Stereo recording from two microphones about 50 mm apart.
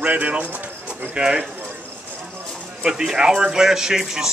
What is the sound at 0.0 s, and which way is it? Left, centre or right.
Speech, right.